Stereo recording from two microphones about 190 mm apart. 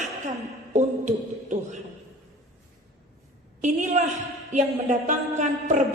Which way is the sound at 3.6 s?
40° right (ahead or behind).